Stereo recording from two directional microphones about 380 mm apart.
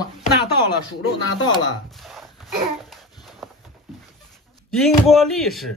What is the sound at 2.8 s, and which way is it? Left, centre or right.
Babbling, centre.